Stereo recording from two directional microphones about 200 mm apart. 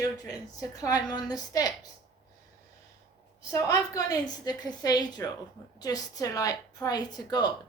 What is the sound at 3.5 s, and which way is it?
A woman's voice, 15° left (ahead or behind).